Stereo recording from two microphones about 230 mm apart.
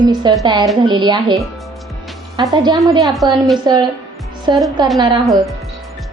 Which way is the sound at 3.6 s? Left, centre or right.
Centre.